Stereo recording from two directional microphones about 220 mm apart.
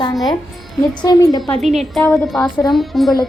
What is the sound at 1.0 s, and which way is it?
Speech, 15° left (ahead or behind).